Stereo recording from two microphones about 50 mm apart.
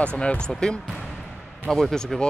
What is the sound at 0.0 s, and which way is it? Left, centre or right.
Speech, left.